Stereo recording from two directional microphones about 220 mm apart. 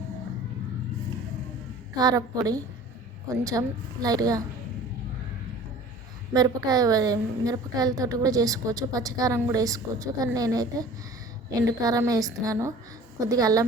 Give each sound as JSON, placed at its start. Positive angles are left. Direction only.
{"t": 2.0, "sound": "a woman's voice", "side_deg": -15}
{"t": 6.3, "sound": "a woman's voice", "side_deg": -15}